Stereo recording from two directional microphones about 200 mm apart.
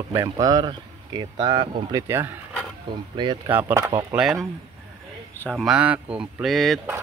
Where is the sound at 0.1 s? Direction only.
15° right (ahead or behind).